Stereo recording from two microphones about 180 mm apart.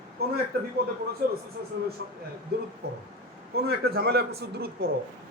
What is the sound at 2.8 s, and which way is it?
A man's voice, 65° right (ahead or behind).